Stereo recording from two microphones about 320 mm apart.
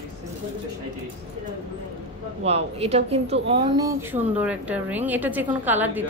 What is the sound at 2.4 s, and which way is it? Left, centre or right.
A woman's voice, centre.